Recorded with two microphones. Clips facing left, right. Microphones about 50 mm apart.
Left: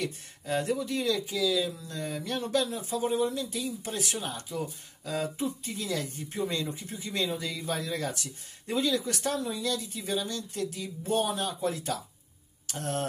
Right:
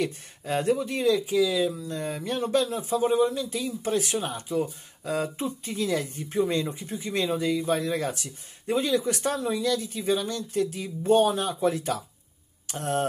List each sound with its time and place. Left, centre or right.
0.0 s speech: right